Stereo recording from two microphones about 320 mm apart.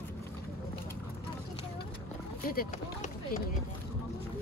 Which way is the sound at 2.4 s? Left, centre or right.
Left.